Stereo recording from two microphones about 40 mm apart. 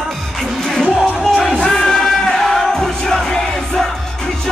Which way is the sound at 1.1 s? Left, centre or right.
Centre.